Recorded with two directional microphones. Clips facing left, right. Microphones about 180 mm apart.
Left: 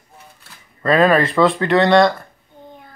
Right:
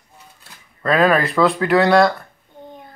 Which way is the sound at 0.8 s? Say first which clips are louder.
Left 2 dB; centre (ahead or behind).